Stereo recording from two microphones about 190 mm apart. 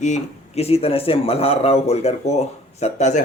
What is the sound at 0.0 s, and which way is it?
Speech, 35° left (ahead or behind).